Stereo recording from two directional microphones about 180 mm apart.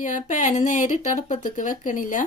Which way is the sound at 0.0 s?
45° left (ahead or behind).